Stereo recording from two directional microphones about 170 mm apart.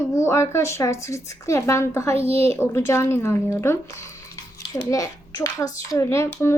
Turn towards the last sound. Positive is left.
turn(degrees=15)  # may be behind; listen again after turning